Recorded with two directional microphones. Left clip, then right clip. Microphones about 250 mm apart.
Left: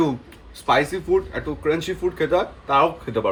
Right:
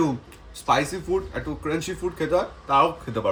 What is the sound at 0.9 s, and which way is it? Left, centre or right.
A man's voice, right.